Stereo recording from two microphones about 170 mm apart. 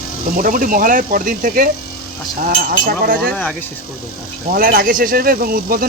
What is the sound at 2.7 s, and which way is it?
Speech, 60° right (ahead or behind).